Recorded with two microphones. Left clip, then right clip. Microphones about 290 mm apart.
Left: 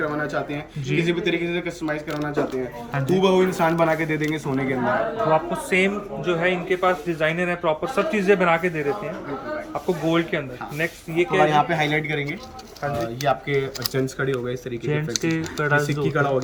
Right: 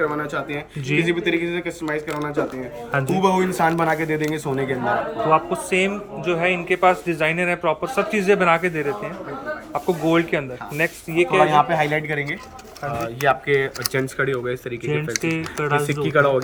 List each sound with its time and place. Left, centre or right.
0.0 s speech: centre
5.3 s speech: centre
13.2 s speech: centre